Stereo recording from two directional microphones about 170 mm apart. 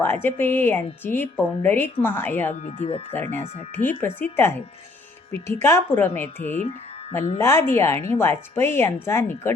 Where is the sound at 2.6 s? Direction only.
45° left (ahead or behind).